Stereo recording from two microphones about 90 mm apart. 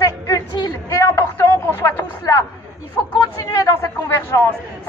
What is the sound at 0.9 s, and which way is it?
Speech, 35° left (ahead or behind).